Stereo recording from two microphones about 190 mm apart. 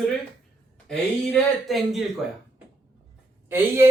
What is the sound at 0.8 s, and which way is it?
Speech, 5° left (ahead or behind).